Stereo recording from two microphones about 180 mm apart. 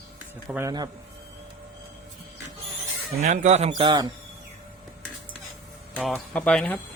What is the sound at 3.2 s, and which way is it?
Speech, 40° right (ahead or behind).